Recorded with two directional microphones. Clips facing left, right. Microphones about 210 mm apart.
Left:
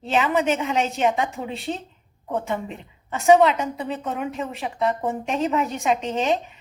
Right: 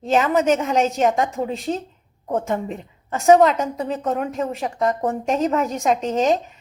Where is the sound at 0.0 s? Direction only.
40° right (ahead or behind).